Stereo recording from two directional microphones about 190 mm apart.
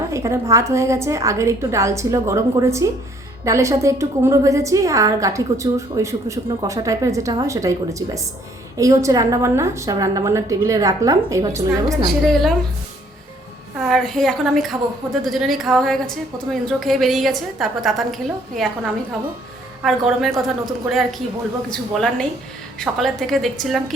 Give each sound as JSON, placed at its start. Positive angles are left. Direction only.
{"t": 0.1, "sound": "a woman's voice", "side_deg": -15}
{"t": 12.2, "sound": "a woman's voice", "side_deg": 0}
{"t": 13.7, "sound": "a woman's voice", "side_deg": 0}
{"t": 19.8, "sound": "a woman's voice", "side_deg": 0}
{"t": 21.7, "sound": "a woman's voice", "side_deg": 5}